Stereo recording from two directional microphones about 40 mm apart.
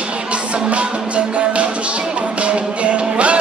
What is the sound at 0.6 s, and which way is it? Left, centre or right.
Music, right.